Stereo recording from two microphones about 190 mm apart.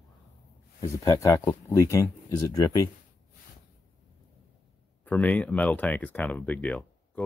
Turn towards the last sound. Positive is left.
turn(degrees=5)  # may be behind; listen again after turning